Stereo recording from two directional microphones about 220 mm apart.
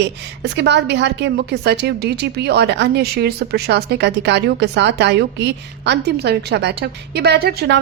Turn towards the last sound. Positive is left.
turn(degrees=-50)  # may be behind; listen again after turning